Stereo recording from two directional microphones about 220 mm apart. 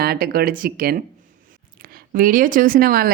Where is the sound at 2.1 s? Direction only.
40° right (ahead or behind).